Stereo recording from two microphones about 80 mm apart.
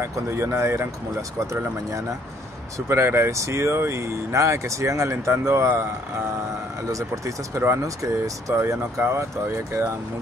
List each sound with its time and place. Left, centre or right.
0.0 s speech: right
6.9 s speech: right